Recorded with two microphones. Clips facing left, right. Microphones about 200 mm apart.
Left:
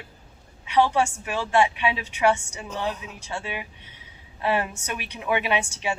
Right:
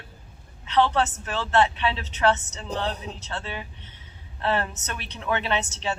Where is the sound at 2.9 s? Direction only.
35° right (ahead or behind).